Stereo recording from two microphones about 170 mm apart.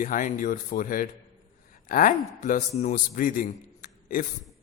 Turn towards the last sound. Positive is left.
turn(degrees=55)  # may be behind; listen again after turning